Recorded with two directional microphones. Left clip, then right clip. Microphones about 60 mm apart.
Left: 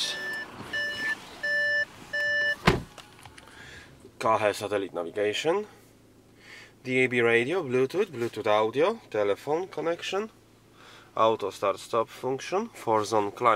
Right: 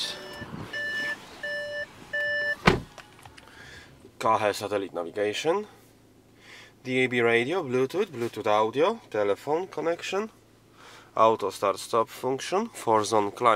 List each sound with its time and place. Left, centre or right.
0.2 s reversing beeps: left
2.0 s vehicle: left
3.3 s speech: centre; by 13.5 s right